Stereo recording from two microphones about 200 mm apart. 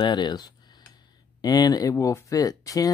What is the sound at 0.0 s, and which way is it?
Speech, 20° left (ahead or behind).